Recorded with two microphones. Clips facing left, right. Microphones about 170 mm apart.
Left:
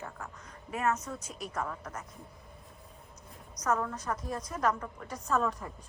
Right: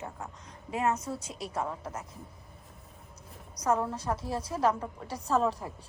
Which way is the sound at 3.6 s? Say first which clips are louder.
Right 3 dB; 30° right (ahead or behind).